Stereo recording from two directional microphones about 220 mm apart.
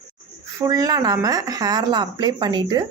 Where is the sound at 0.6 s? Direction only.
15° right (ahead or behind).